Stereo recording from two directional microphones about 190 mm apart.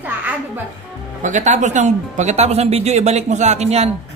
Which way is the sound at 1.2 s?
40° right (ahead or behind).